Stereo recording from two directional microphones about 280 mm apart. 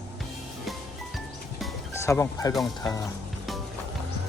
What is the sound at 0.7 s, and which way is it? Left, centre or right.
Music, centre.